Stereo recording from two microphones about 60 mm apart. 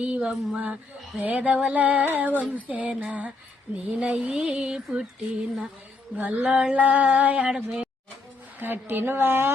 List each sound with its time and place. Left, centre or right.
0.0 s speech: centre
8.5 s a woman's voice: right